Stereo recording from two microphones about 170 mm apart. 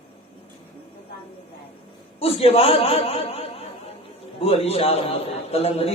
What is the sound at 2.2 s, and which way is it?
A man's voice, 35° left (ahead or behind).